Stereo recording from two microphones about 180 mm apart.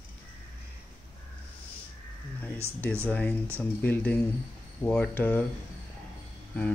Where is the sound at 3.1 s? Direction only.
10° left (ahead or behind).